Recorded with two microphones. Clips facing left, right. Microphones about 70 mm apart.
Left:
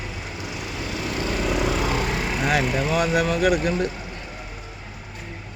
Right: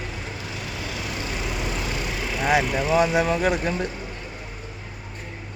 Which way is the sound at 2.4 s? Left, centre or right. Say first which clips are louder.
Right 2 dB; centre.